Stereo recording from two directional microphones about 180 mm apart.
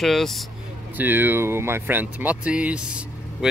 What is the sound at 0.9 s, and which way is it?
Speech, 10° right (ahead or behind).